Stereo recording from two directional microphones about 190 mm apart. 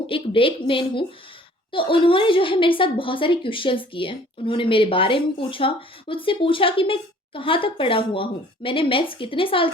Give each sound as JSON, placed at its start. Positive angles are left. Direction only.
{"t": 0.1, "sound": "a woman's voice", "side_deg": 30}